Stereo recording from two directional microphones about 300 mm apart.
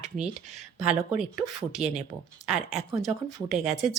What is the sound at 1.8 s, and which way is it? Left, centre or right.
Speech, right.